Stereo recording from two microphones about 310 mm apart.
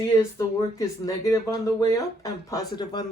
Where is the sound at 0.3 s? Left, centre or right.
Centre.